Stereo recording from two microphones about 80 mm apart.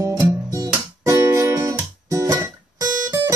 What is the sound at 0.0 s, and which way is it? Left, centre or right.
Guitar, right.